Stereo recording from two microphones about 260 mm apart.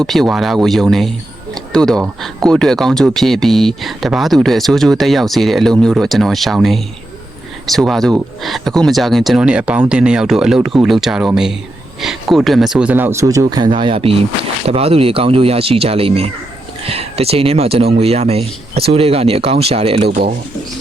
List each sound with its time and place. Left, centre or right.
0.0 s speech: centre; by 20.1 s right
20.1 s speech: right